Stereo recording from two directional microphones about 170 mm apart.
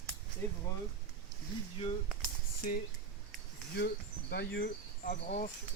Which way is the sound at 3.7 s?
70° left (ahead or behind).